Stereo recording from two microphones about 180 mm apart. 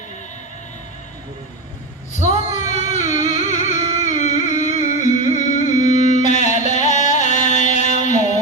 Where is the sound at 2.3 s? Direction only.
40° left (ahead or behind).